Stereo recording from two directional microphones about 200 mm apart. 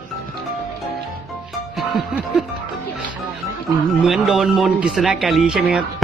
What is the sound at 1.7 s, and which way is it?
Music, centre (ahead or behind).